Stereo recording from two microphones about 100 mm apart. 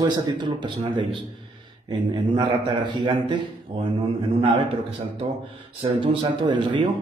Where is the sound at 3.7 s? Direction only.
70° right (ahead or behind).